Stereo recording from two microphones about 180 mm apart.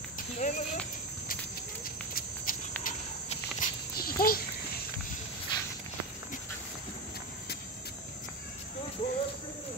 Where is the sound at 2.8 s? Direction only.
45° left (ahead or behind).